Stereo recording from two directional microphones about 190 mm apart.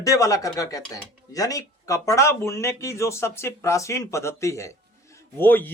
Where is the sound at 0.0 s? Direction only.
15° left (ahead or behind).